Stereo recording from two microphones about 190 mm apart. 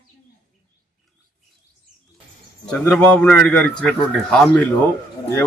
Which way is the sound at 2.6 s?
5° left (ahead or behind).